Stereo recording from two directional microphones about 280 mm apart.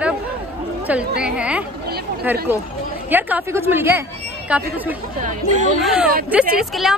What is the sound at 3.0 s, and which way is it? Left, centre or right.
A woman's voice, centre.